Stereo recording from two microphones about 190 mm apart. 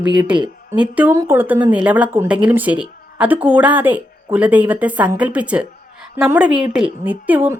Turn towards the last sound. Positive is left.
turn(degrees=-10)  # may be behind; listen again after turning